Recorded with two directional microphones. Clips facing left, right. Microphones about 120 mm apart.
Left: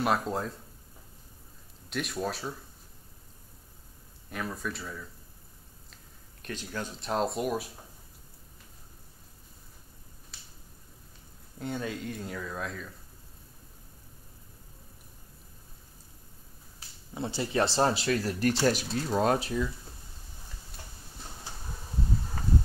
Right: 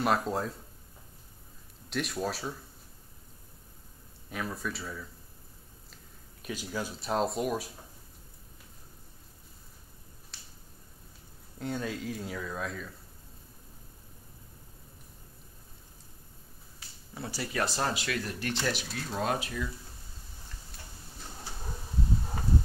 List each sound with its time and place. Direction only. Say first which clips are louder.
0.0 s speech: even; centre (ahead or behind)
1.9 s speech: even; centre (ahead or behind)
4.3 s speech: even; centre (ahead or behind)
6.4 s speech: right 1 dB; 10° right (ahead or behind)
11.5 s speech: even; centre (ahead or behind)
17.1 s speech: left 5 dB; 25° left (ahead or behind)